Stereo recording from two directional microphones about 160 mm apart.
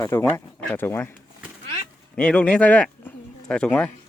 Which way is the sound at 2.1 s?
5° left (ahead or behind).